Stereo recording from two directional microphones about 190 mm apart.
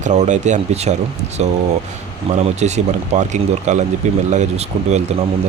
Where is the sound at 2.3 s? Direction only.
35° right (ahead or behind).